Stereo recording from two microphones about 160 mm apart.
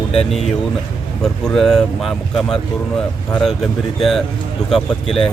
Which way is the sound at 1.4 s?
5° left (ahead or behind).